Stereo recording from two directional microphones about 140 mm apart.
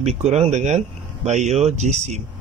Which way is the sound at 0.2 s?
50° right (ahead or behind).